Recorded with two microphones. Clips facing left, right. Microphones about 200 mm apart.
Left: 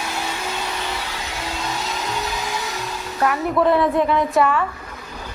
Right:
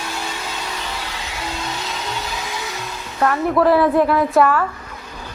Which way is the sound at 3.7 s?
Centre (ahead or behind).